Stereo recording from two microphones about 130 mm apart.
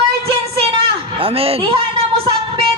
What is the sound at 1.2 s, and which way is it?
Speech, 45° right (ahead or behind).